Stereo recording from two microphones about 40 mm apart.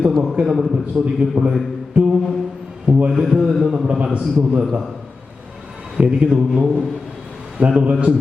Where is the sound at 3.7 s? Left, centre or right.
Right.